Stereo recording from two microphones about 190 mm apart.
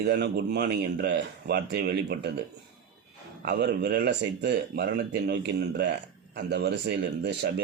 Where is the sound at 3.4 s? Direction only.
60° right (ahead or behind).